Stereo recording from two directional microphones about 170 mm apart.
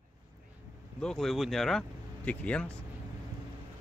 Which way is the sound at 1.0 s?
5° left (ahead or behind).